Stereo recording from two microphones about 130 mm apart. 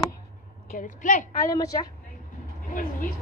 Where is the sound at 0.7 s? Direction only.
90° left.